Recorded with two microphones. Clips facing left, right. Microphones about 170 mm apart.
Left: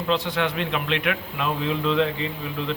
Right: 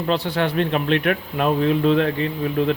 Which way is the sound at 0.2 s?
35° right (ahead or behind).